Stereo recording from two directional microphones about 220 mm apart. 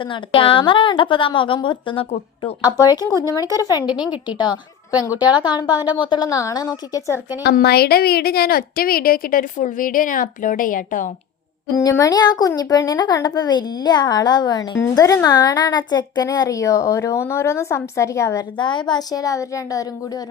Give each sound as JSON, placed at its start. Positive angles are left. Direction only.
{"t": 0.0, "sound": "a woman's voice", "side_deg": 25}
{"t": 3.9, "sound": "a woman's voice", "side_deg": -5}
{"t": 4.3, "sound": "a woman's voice", "side_deg": 20}
{"t": 7.4, "sound": "a woman's voice", "side_deg": 45}
{"t": 11.8, "sound": "speech", "side_deg": 15}